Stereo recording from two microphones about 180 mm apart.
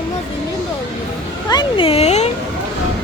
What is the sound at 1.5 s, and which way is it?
Speech, 25° left (ahead or behind).